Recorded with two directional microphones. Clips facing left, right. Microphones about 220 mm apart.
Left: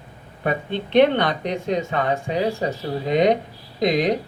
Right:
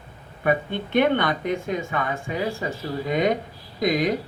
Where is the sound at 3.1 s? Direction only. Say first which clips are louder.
Left 5 dB; 50° right (ahead or behind).